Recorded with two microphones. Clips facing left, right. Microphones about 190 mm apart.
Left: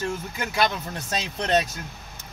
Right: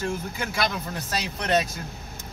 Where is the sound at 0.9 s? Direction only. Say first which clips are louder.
Left 1 dB; 25° left (ahead or behind).